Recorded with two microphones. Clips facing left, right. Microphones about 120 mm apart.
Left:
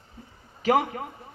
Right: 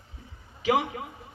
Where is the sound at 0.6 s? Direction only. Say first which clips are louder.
Left 2 dB; 45° left (ahead or behind).